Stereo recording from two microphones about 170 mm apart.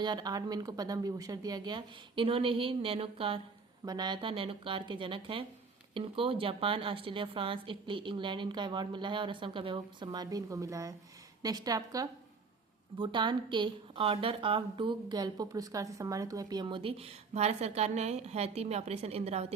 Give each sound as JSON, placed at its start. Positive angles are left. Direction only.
{"t": 0.0, "sound": "a woman's voice", "side_deg": -25}